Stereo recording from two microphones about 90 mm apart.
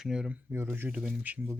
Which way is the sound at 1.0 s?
10° right (ahead or behind).